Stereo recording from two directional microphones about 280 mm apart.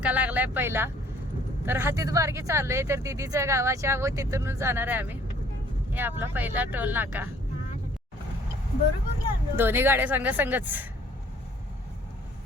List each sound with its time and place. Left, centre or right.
0.0 s speech: centre
9.6 s speech: centre